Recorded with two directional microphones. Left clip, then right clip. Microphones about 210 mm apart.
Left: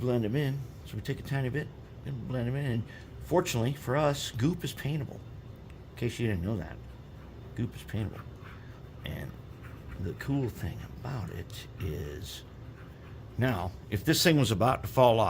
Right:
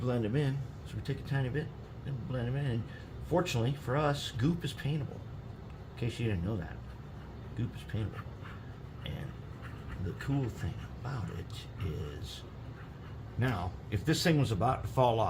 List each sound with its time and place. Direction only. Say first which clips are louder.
0.0 s speech: left 3 dB; 45° left (ahead or behind)
10.2 s speech: left 3 dB; 50° left (ahead or behind)
13.4 s speech: left 4 dB; 55° left (ahead or behind)